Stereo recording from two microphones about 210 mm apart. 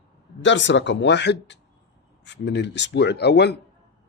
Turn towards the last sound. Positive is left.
turn(degrees=50)  # may be behind; listen again after turning